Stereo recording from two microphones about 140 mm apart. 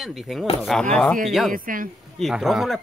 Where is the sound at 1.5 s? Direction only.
80° right.